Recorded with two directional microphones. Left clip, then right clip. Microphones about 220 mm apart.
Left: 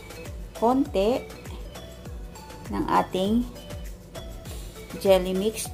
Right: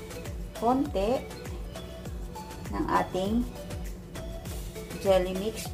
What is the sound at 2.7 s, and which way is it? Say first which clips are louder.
Speech: left 4 dB; 40° left (ahead or behind).